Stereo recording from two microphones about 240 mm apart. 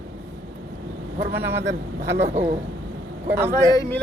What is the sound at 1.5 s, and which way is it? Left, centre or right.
Speech, right.